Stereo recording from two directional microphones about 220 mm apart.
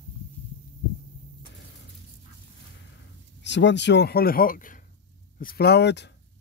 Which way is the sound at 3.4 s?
55° left (ahead or behind).